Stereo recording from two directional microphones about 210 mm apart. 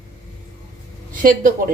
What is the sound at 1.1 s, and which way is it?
Speech, 40° right (ahead or behind).